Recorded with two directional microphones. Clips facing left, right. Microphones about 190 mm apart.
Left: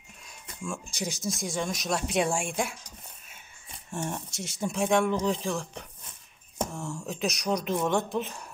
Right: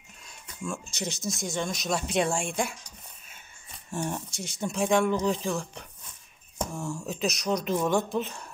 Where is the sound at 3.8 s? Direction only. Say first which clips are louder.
Right 2 dB; centre (ahead or behind).